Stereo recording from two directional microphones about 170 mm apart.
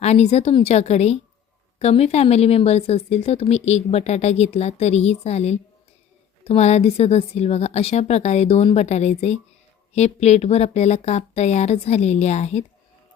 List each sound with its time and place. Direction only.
0.0 s a woman's voice: 40° left (ahead or behind)